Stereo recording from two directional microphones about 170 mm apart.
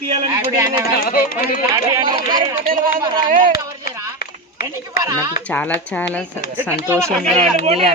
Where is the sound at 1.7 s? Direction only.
25° right (ahead or behind).